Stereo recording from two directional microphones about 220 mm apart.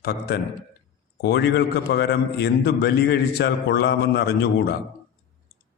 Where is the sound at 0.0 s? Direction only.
45° left (ahead or behind).